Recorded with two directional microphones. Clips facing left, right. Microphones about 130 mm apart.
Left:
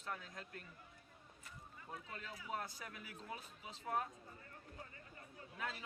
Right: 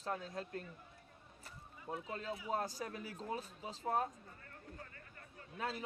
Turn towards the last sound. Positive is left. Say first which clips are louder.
# right 5 dB
turn(degrees=-35)  # may be behind; listen again after turning